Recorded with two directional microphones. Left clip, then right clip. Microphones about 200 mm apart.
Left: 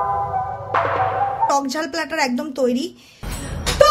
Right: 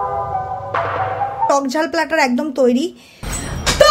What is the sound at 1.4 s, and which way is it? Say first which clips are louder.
Speech: right 4 dB; 10° right (ahead or behind).